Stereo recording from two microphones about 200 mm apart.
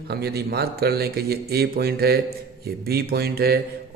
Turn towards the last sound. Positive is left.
turn(degrees=-50)  # may be behind; listen again after turning